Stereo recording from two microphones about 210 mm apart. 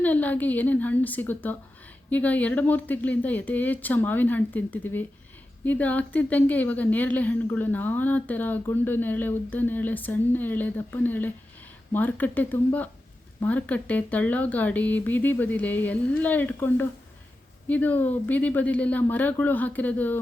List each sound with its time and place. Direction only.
0.0 s a woman's voice: 10° left (ahead or behind)